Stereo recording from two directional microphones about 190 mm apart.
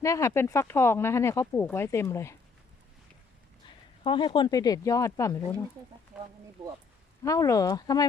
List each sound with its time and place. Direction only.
0.0 s speech: 15° left (ahead or behind)
4.0 s speech: 25° left (ahead or behind)
6.1 s speech: 5° right (ahead or behind)
7.2 s speech: 20° left (ahead or behind)